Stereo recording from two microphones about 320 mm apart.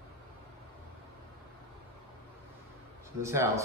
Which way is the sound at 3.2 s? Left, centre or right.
Centre.